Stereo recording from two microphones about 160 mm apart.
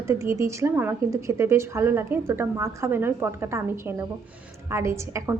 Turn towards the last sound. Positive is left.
turn(degrees=-15)  # may be behind; listen again after turning